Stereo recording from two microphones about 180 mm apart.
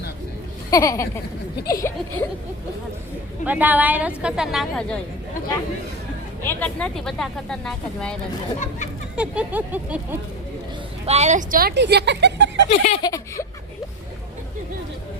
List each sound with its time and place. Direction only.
0.7 s speech: 15° left (ahead or behind)
3.4 s a woman's voice: 10° right (ahead or behind)
6.4 s speech: 10° left (ahead or behind)
8.5 s speech: 40° left (ahead or behind)
9.1 s a woman's voice: 5° right (ahead or behind)
11.0 s a woman's voice: 35° right (ahead or behind)
11.7 s speech: 70° right (ahead or behind)
12.6 s speech: 35° left (ahead or behind)
13.0 s speech: 20° left (ahead or behind)